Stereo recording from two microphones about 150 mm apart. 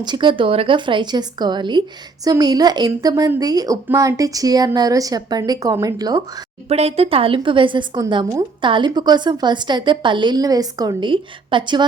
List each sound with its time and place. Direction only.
0.0 s a woman's voice: 30° right (ahead or behind)
6.7 s a woman's voice: 40° right (ahead or behind)